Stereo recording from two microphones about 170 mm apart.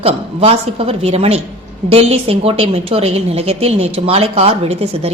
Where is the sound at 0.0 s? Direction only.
35° right (ahead or behind).